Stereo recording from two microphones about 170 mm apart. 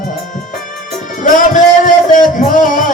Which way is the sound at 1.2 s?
50° left (ahead or behind).